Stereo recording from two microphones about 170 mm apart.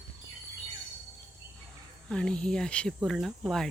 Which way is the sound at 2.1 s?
5° left (ahead or behind).